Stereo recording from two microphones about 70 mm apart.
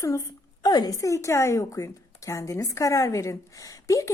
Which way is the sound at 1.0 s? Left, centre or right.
Left.